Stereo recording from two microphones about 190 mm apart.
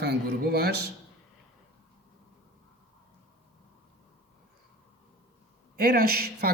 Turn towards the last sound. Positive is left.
turn(degrees=-55)  # may be behind; listen again after turning